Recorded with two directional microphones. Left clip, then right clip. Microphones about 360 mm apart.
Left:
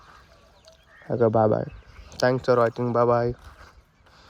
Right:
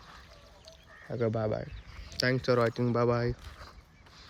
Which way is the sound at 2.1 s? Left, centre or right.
Centre.